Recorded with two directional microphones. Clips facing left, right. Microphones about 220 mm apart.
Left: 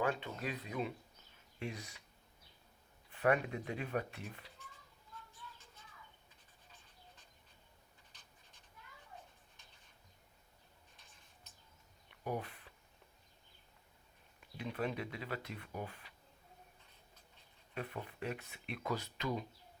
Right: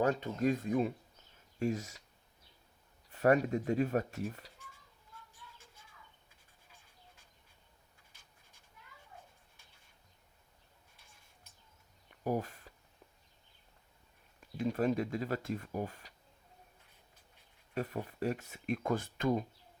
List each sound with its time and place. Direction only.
0.0 s speech: 40° right (ahead or behind)
3.1 s speech: 40° right (ahead or behind)
12.2 s a sound: 45° right (ahead or behind)
14.6 s speech: 45° right (ahead or behind)
17.7 s speech: 40° right (ahead or behind)